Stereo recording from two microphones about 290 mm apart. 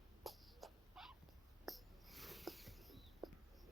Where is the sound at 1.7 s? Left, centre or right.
Centre.